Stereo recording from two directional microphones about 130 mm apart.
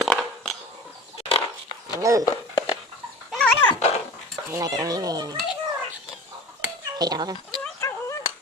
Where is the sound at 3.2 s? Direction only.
5° left (ahead or behind).